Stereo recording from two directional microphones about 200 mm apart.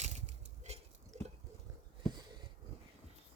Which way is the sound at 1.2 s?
35° right (ahead or behind).